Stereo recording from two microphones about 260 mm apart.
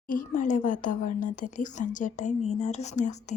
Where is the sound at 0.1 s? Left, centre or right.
Left.